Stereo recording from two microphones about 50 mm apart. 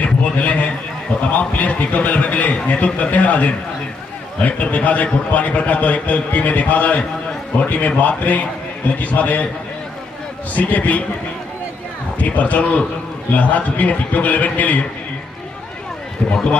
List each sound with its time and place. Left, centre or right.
0.0 s a sound: left
1.3 s a man's voice: left
10.5 s a man's voice: left
12.2 s a man's voice: left